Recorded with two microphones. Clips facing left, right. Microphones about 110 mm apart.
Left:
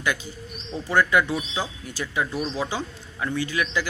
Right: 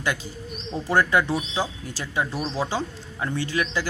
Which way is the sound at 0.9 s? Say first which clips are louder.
Even; 35° right (ahead or behind).